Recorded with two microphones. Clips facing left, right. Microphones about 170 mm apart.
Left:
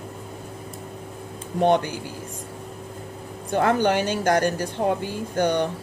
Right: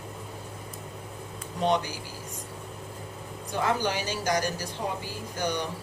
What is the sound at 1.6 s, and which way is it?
Speech, 55° left (ahead or behind).